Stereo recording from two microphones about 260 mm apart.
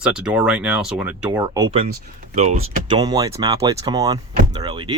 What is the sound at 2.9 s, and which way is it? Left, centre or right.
Speech, centre.